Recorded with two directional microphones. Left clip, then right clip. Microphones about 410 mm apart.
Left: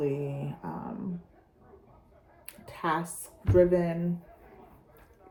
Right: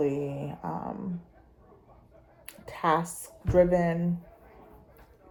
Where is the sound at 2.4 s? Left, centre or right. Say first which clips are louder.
Right 4 dB; centre.